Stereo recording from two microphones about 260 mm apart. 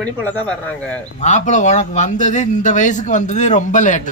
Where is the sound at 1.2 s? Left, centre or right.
Left.